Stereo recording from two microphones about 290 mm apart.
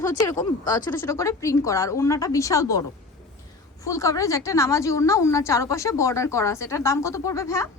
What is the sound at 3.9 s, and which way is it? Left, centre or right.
Speech, centre.